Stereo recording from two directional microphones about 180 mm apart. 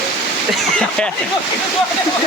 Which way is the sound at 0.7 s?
5° left (ahead or behind).